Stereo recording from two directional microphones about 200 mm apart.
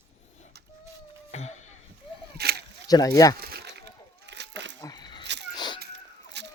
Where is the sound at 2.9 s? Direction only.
20° left (ahead or behind).